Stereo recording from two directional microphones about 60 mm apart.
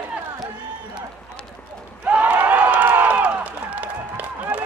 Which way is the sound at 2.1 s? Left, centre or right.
Right.